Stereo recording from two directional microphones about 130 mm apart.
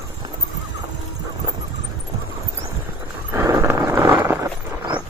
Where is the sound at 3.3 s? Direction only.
25° right (ahead or behind).